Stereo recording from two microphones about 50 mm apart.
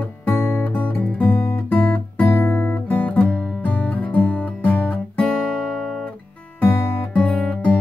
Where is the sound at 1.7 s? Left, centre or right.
Left.